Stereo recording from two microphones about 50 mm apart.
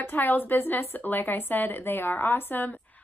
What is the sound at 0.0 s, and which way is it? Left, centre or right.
A woman's voice, left.